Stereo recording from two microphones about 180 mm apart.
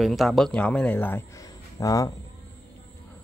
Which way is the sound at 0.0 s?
Centre (ahead or behind).